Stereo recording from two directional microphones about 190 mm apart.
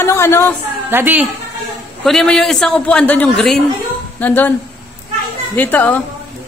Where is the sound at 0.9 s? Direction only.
10° right (ahead or behind).